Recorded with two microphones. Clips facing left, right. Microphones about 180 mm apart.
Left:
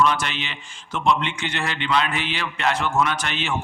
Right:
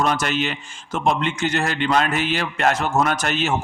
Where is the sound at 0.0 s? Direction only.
45° right (ahead or behind).